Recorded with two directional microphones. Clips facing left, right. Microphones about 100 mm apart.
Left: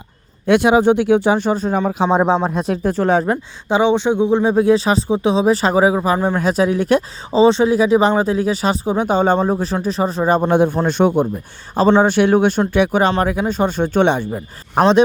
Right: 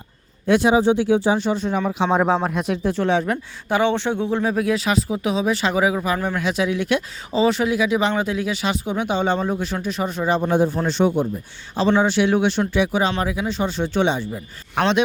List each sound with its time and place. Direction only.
0.4 s speech: 65° left (ahead or behind); by 3.3 s 40° left (ahead or behind)
3.7 s speech: 20° left (ahead or behind)
6.4 s speech: 40° left (ahead or behind)
7.4 s speech: 30° left (ahead or behind); by 14.4 s 55° left (ahead or behind)
14.8 s speech: 35° left (ahead or behind)